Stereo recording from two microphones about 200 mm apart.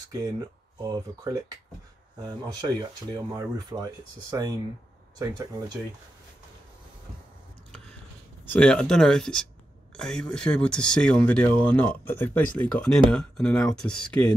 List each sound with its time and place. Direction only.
0.7 s speech: 20° right (ahead or behind)
8.5 s speech: 5° left (ahead or behind)